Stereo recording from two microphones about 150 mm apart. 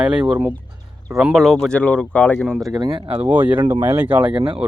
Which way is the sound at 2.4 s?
Centre (ahead or behind).